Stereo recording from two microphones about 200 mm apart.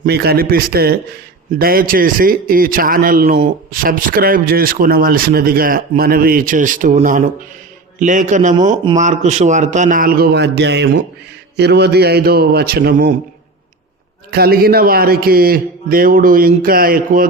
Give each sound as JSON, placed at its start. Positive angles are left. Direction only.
{"t": 0.0, "sound": "a man's voice", "side_deg": -55}
{"t": 14.3, "sound": "a man's voice", "side_deg": -50}